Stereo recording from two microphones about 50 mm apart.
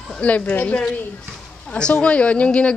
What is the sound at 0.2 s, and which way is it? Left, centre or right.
Speech, left.